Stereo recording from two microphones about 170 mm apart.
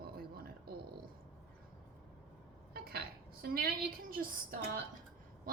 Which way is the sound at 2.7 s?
60° right (ahead or behind).